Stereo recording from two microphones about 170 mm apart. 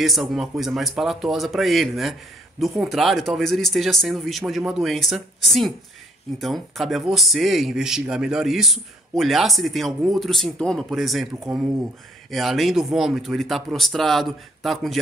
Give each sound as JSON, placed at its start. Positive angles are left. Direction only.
{"t": 0.0, "sound": "speech", "side_deg": 0}